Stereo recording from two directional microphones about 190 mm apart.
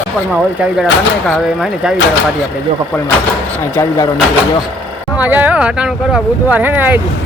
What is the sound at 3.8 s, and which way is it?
Speech, 20° left (ahead or behind).